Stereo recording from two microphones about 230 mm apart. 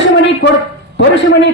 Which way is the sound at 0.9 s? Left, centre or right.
Left.